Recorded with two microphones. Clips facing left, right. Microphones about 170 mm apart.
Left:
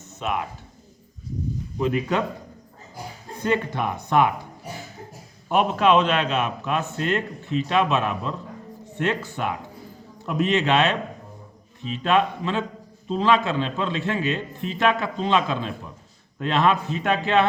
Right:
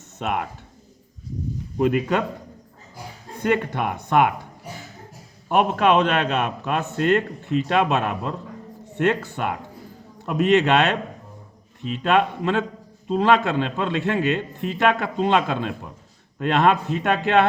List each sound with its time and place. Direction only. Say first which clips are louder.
0.2 s a man's voice: right 1 dB; 55° right (ahead or behind)
3.5 s a man's voice: right 1 dB; 55° right (ahead or behind)
5.5 s a man's voice: right 1 dB; 55° right (ahead or behind)